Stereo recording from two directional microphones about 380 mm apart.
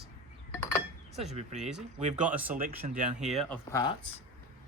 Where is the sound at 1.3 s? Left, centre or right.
Centre.